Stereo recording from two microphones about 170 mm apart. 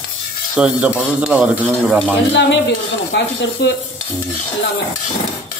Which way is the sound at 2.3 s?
90° left.